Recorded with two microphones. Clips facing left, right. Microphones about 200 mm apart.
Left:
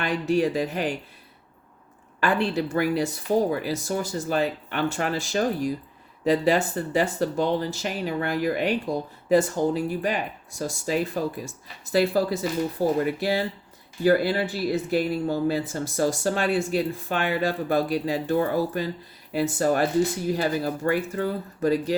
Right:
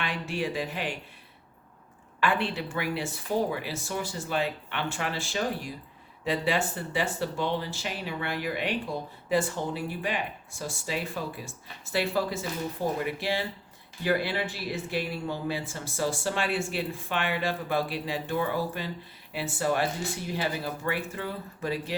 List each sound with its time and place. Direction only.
0.0 s speech: 40° left (ahead or behind)
2.2 s speech: 40° left (ahead or behind)